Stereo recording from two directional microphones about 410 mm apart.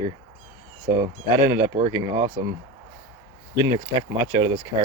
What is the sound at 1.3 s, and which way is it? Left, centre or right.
Speech, centre.